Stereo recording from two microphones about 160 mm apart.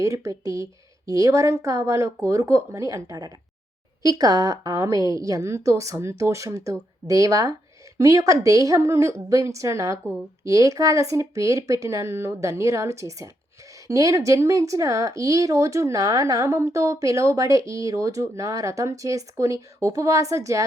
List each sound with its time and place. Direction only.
0.0 s speech: 20° right (ahead or behind)